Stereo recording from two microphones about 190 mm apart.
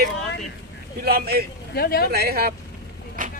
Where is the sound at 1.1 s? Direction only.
55° right (ahead or behind).